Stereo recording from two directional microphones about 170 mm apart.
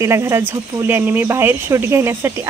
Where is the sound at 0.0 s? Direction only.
15° right (ahead or behind).